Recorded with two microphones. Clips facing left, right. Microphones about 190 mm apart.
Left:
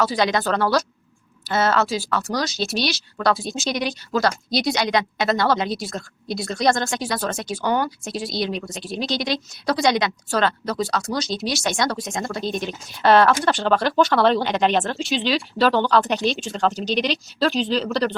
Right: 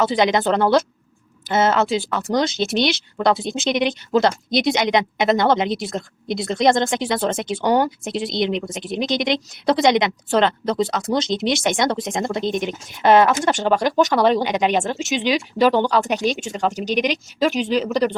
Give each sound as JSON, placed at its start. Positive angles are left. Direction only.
{"t": 0.0, "sound": "speech", "side_deg": -20}